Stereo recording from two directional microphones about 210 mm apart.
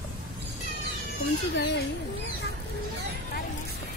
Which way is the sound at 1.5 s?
55° left (ahead or behind).